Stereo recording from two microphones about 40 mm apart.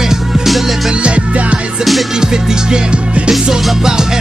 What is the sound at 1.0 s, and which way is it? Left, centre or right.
Music, right.